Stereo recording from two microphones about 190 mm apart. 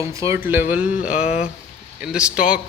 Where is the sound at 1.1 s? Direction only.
35° left (ahead or behind).